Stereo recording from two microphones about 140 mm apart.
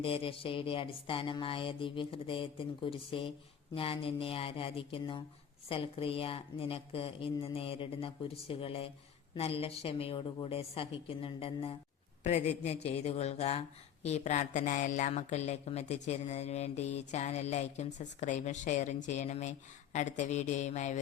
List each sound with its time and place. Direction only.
0.0 s speech: 40° left (ahead or behind)
12.2 s a woman's voice: 55° left (ahead or behind)